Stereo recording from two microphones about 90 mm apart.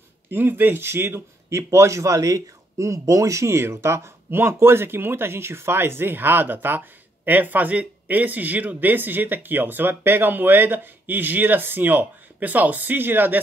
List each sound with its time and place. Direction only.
0.3 s a man's voice: 25° right (ahead or behind)